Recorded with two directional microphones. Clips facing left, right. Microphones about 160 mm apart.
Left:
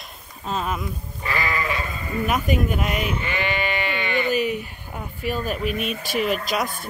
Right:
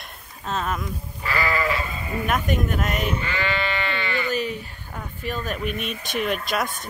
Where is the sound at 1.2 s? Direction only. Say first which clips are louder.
Right 1 dB; 20° left (ahead or behind).